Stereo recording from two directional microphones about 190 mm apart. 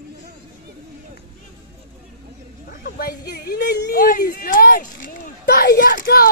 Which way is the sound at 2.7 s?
50° left (ahead or behind).